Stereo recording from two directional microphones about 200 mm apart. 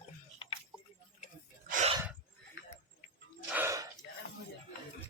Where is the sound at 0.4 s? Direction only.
25° left (ahead or behind).